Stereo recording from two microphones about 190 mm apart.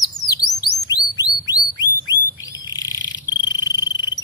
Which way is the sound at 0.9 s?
20° left (ahead or behind).